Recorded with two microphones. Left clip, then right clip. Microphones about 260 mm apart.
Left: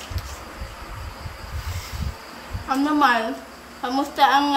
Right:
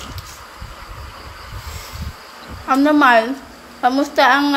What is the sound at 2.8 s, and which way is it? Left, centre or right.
A woman's voice, centre.